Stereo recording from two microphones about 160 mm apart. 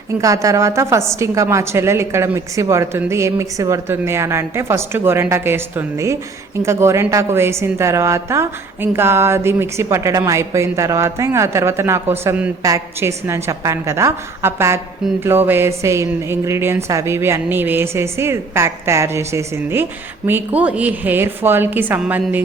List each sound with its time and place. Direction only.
0.2 s a woman's voice: 20° right (ahead or behind)